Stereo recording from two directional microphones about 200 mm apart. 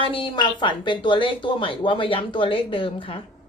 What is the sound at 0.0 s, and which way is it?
Speech, 25° left (ahead or behind).